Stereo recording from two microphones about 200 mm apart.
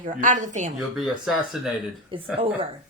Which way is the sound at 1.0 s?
Centre (ahead or behind).